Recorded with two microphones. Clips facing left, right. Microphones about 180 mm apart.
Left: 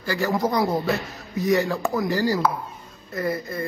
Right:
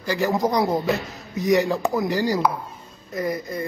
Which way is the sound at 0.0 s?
20° right (ahead or behind).